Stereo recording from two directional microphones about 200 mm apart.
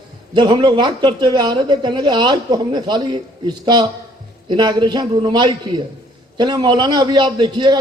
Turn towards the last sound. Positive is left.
turn(degrees=-20)  # may be behind; listen again after turning